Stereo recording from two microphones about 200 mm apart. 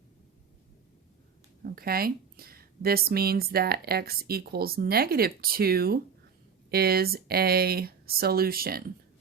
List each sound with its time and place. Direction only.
1.6 s speech: 50° right (ahead or behind)